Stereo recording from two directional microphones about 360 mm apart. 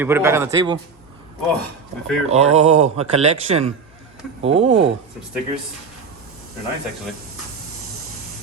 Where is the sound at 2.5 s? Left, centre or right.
Centre.